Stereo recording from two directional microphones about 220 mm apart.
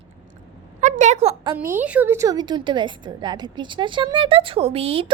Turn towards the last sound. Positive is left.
turn(degrees=-25)  # may be behind; listen again after turning